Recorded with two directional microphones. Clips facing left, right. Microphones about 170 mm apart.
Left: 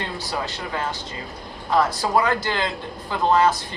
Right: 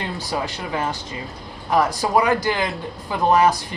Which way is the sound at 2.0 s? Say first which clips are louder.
Right 2 dB; 15° right (ahead or behind).